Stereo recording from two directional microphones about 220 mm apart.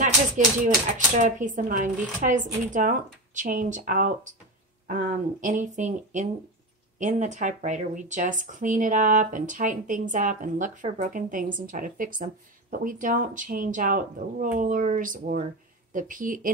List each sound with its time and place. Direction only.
0.4 s speech: 35° right (ahead or behind)